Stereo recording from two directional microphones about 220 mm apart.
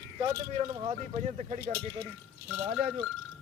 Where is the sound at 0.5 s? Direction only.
25° right (ahead or behind).